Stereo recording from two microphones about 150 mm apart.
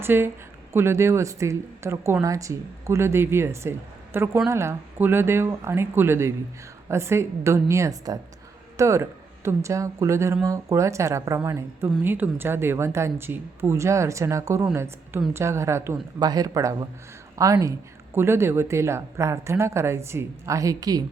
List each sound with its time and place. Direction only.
0.0 s speech: 15° right (ahead or behind)